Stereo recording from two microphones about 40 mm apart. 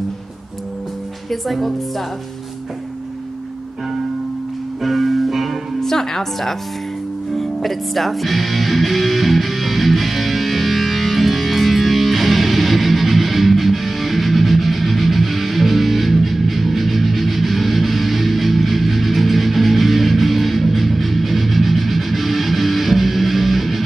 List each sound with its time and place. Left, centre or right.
1.3 s speech: centre
4.8 s music: centre
5.8 s music: centre